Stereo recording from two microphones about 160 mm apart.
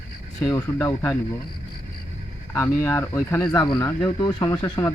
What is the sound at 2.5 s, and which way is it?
Speech, 15° left (ahead or behind).